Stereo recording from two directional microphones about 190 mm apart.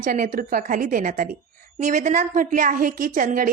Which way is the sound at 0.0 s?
45° right (ahead or behind).